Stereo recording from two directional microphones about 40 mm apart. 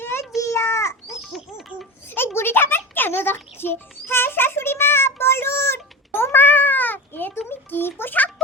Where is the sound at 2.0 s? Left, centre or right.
Left.